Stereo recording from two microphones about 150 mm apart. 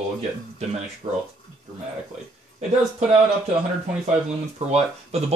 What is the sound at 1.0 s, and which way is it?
Speech, 40° right (ahead or behind).